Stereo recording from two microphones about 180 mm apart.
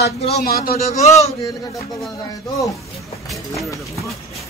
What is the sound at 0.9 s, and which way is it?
Speech, 40° left (ahead or behind).